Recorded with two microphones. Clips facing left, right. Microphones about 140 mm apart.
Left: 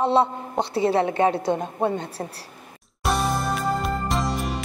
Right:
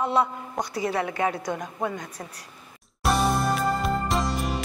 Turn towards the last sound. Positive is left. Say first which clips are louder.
# left 1 dB
turn(degrees=0)  # may be behind; listen again after turning